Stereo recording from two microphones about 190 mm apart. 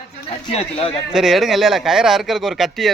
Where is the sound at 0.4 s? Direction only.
30° left (ahead or behind).